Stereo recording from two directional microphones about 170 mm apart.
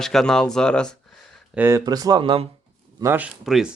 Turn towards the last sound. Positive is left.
turn(degrees=-5)  # may be behind; listen again after turning